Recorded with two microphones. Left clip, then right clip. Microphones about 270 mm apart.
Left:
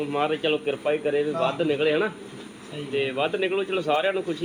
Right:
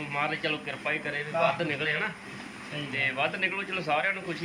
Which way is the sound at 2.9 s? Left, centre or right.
Left.